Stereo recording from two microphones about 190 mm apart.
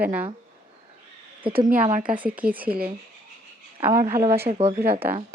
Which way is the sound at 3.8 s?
15° right (ahead or behind).